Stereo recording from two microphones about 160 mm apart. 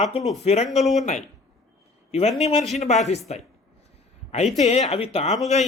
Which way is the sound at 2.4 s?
40° left (ahead or behind).